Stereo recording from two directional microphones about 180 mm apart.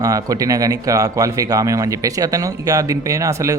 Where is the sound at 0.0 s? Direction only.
20° right (ahead or behind).